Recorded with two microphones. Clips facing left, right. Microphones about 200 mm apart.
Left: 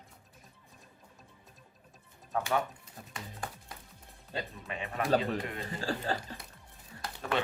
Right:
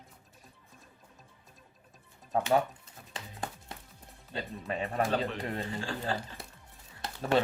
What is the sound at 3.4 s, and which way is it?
Music, 25° right (ahead or behind).